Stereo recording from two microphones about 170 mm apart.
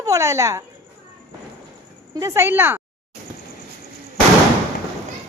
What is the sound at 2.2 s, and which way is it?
Speech, 15° right (ahead or behind).